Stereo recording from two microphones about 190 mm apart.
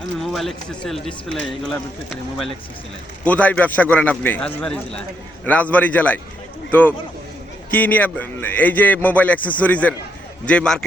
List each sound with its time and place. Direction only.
0.2 s a man's voice: centre (ahead or behind)